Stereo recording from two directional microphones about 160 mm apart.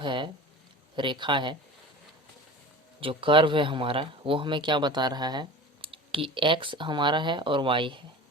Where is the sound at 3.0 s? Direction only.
35° right (ahead or behind).